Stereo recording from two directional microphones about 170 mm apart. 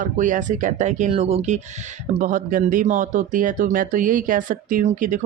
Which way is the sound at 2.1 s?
50° right (ahead or behind).